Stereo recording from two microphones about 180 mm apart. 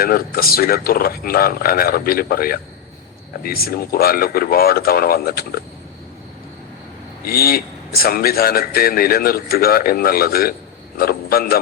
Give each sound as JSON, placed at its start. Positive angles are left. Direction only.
{"t": 0.0, "sound": "speech", "side_deg": 55}
{"t": 7.3, "sound": "speech", "side_deg": 55}